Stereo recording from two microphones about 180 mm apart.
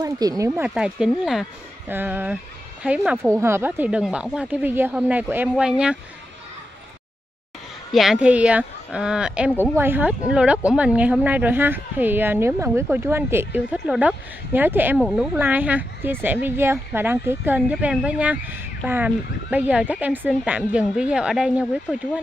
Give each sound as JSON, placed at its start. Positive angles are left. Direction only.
{"t": 0.0, "sound": "speech", "side_deg": -20}
{"t": 0.6, "sound": "speech", "side_deg": -5}
{"t": 7.9, "sound": "speech", "side_deg": 0}
{"t": 15.0, "sound": "speech", "side_deg": 0}